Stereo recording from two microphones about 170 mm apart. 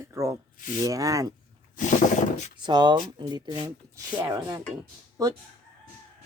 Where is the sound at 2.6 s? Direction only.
25° right (ahead or behind).